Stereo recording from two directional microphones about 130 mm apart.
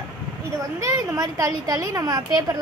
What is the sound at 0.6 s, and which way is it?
A woman's voice, 25° right (ahead or behind).